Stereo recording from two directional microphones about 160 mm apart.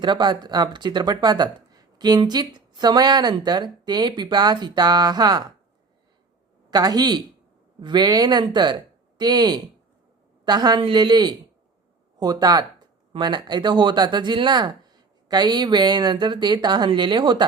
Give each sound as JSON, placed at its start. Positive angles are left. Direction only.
{"t": 0.0, "sound": "speech", "side_deg": -30}
{"t": 6.7, "sound": "speech", "side_deg": -25}